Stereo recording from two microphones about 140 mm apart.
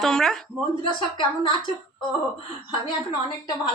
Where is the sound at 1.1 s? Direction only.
35° left (ahead or behind).